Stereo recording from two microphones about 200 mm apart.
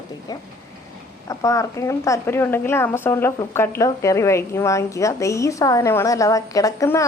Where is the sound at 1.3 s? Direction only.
15° left (ahead or behind).